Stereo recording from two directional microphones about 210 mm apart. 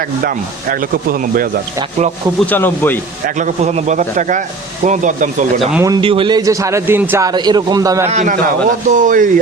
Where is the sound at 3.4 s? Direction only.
35° right (ahead or behind).